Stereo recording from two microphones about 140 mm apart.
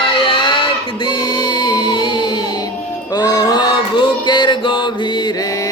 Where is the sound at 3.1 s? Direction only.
30° left (ahead or behind).